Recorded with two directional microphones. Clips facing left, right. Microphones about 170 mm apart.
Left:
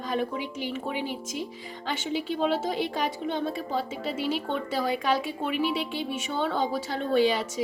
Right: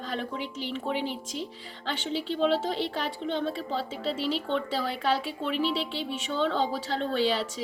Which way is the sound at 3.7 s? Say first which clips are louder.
Left 1 dB; 45° left (ahead or behind).